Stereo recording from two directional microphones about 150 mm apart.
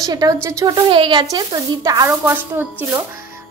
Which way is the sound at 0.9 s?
35° right (ahead or behind).